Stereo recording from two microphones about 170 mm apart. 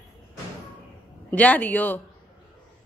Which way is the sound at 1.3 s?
10° left (ahead or behind).